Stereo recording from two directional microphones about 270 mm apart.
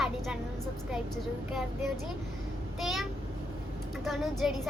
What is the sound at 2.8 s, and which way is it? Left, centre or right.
Child singing, centre.